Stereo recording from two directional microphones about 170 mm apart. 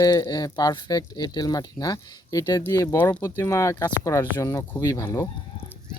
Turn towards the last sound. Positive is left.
turn(degrees=20)  # may be behind; listen again after turning